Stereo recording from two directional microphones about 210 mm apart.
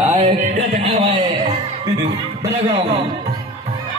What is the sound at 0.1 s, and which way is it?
Music, 35° right (ahead or behind).